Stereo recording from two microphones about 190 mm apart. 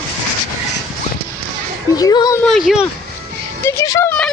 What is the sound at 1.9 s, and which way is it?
Speech, 20° left (ahead or behind).